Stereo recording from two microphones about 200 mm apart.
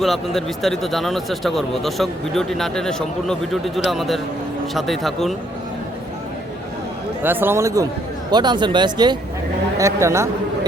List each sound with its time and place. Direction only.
0.0 s speech: centre (ahead or behind)
7.2 s speech: 10° right (ahead or behind)